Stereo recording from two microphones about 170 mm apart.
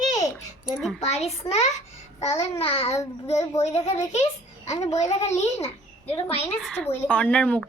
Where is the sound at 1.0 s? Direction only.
40° left (ahead or behind).